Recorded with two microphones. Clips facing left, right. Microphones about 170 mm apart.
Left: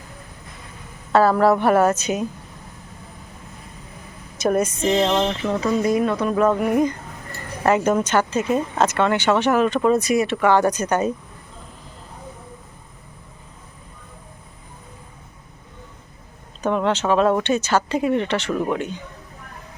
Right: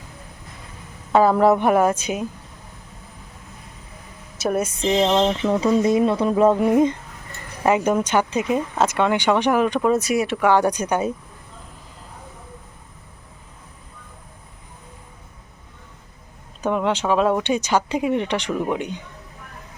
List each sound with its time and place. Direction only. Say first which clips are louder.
1.1 s speech: even; 15° right (ahead or behind)
4.4 s speech: left 3 dB; 5° right (ahead or behind)
5.8 s speech: right 2 dB; 25° right (ahead or behind)
7.6 s speech: even; 10° right (ahead or behind)
16.6 s speech: left 1 dB; 10° right (ahead or behind)